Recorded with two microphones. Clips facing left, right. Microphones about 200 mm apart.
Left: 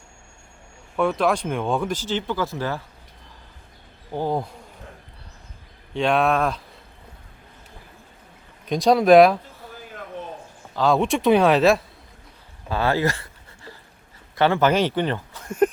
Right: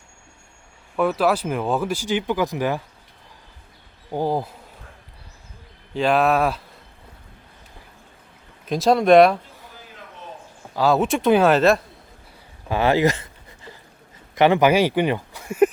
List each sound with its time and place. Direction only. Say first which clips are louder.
0.9 s speech: right 1 dB; 5° right (ahead or behind)
4.1 s speech: right 2 dB; 10° right (ahead or behind)
5.9 s speech: right 2 dB; centre (ahead or behind)
8.6 s speech: even; centre (ahead or behind)
10.8 s speech: right 1 dB; 5° right (ahead or behind)
12.6 s a sound: right 4 dB; 15° right (ahead or behind)
14.3 s speech: right 3 dB; 15° right (ahead or behind)